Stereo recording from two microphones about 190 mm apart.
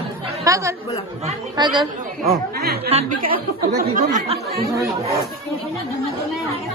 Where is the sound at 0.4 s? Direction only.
15° right (ahead or behind).